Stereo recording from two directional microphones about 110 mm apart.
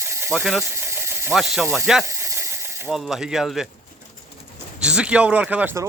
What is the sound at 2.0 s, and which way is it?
Mechanisms, 25° right (ahead or behind).